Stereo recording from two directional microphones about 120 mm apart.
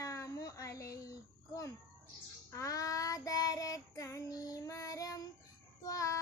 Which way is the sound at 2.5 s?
25° left (ahead or behind).